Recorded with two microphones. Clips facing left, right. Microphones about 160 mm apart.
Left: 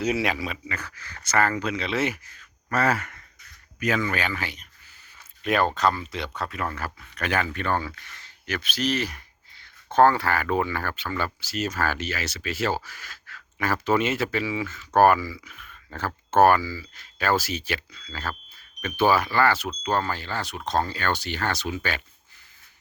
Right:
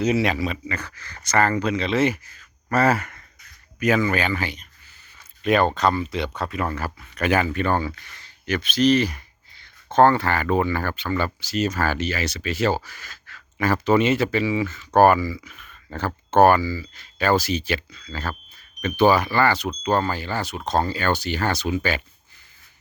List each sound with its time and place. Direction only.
0.0 s speech: 10° left (ahead or behind)
2.7 s speech: 40° right (ahead or behind)
3.8 s speech: 10° right (ahead or behind)